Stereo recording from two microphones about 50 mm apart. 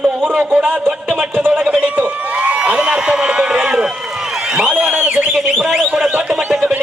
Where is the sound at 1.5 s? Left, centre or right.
Right.